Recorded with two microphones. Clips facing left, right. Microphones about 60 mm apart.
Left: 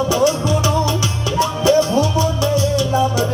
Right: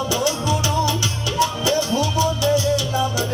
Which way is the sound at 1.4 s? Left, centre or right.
Left.